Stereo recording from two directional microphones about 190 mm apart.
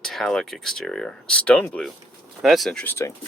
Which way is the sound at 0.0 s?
Centre (ahead or behind).